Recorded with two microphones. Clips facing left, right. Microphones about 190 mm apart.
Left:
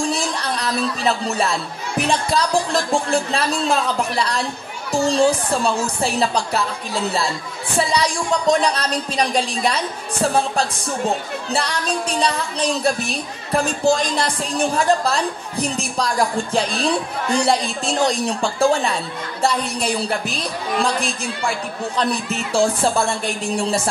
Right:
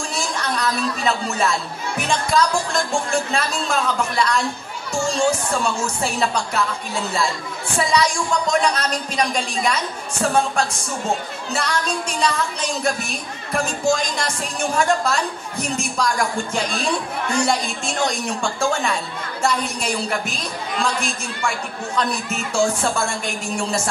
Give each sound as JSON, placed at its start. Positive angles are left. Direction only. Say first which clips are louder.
{"t": 0.1, "sound": "a woman's voice", "louder": "left 2 dB", "side_deg": 35}
{"t": 7.8, "sound": "a woman's voice", "louder": "right 1 dB", "side_deg": 35}
{"t": 11.5, "sound": "a woman's voice", "louder": "left 1 dB", "side_deg": 35}